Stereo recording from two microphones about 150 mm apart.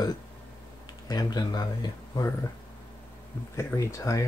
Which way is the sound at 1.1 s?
25° left (ahead or behind).